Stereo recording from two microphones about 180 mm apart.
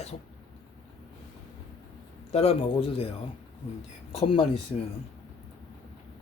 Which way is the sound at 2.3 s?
35° left (ahead or behind).